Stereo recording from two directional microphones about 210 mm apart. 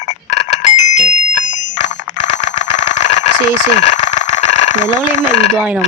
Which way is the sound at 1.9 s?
35° left (ahead or behind).